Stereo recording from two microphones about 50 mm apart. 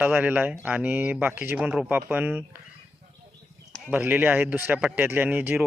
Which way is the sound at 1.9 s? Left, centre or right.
Right.